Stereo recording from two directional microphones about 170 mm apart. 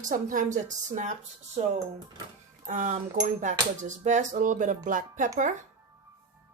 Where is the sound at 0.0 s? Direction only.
50° right (ahead or behind).